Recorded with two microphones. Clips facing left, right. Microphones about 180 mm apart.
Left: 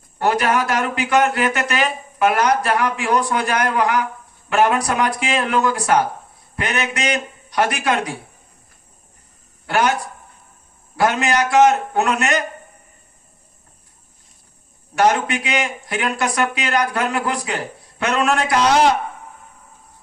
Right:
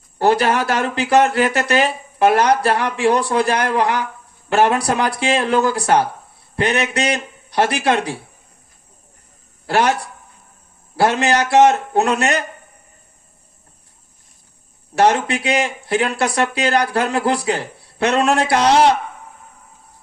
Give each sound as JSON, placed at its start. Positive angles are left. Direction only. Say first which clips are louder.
{"t": 0.2, "sound": "speech", "louder": "right 2 dB", "side_deg": -30}
{"t": 9.6, "sound": "speech", "louder": "right 2 dB", "side_deg": -30}
{"t": 10.9, "sound": "speech", "louder": "right 2 dB", "side_deg": -30}
{"t": 14.9, "sound": "speech", "louder": "right 2 dB", "side_deg": -30}